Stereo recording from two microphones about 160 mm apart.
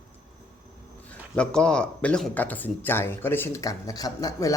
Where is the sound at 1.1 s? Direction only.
5° left (ahead or behind).